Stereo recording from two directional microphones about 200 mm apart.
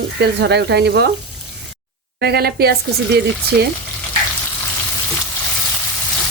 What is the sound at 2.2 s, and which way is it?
Speech, 50° right (ahead or behind).